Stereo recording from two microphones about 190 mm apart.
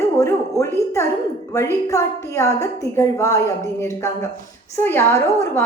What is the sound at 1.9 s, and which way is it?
A woman's voice, 15° left (ahead or behind).